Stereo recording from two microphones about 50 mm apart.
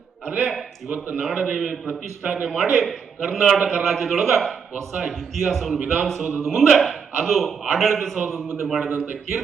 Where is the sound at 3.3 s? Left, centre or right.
Centre.